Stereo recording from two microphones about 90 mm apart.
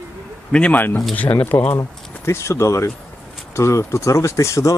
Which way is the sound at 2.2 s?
30° left (ahead or behind).